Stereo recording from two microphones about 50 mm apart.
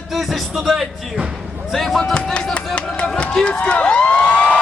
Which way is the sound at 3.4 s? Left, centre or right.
Left.